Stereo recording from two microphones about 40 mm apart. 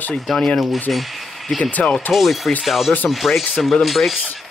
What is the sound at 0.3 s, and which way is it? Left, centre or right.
Speech, centre.